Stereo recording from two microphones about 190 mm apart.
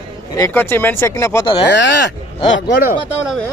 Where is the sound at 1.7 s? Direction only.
70° left (ahead or behind).